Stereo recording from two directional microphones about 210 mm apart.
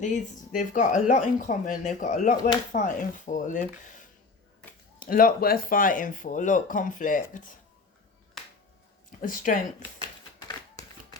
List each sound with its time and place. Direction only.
0.0 s speech: 35° left (ahead or behind)
4.9 s speech: 40° left (ahead or behind)
9.2 s speech: 40° left (ahead or behind)